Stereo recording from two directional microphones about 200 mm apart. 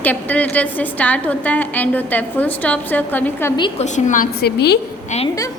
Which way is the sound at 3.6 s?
35° left (ahead or behind).